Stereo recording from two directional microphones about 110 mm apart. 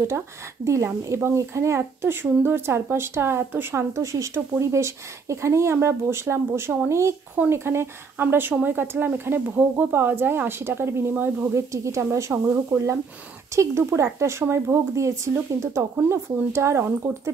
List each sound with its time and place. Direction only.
0.7 s speech: 30° right (ahead or behind)